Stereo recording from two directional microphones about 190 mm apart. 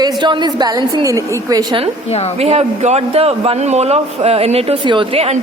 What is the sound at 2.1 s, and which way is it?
Speech, 35° left (ahead or behind).